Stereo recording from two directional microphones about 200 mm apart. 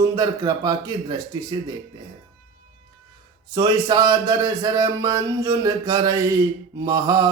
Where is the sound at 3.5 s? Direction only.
20° right (ahead or behind).